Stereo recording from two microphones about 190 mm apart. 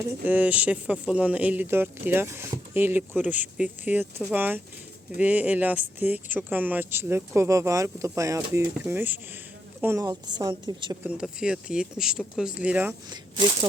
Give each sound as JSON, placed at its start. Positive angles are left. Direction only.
{"t": 0.3, "sound": "a woman's voice", "side_deg": -10}
{"t": 11.0, "sound": "speech", "side_deg": -5}
{"t": 13.1, "sound": "a woman's voice", "side_deg": -20}